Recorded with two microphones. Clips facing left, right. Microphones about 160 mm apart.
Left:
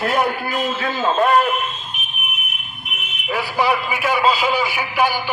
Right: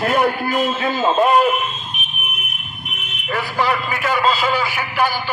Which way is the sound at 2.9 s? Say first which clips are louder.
Even; 10° left (ahead or behind).